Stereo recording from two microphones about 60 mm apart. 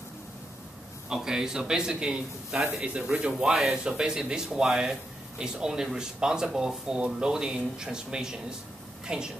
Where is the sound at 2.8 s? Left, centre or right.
Centre.